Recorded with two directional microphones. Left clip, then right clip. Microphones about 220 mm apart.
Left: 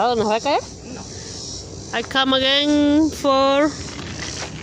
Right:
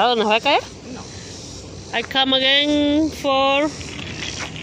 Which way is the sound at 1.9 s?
10° left (ahead or behind).